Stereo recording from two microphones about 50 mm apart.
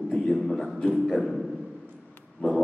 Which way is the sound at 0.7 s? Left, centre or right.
Centre.